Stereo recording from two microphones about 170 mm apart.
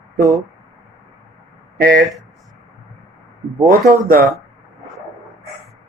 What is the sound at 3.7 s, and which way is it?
Speech, 55° right (ahead or behind).